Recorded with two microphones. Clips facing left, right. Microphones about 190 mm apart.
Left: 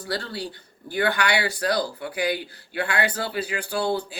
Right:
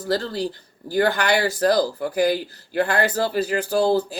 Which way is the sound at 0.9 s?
40° right (ahead or behind).